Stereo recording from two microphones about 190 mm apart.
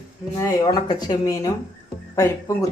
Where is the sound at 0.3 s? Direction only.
20° left (ahead or behind).